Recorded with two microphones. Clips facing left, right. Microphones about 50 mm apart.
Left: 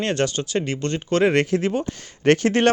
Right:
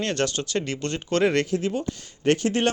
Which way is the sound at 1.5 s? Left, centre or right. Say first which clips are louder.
Left 4 dB; left.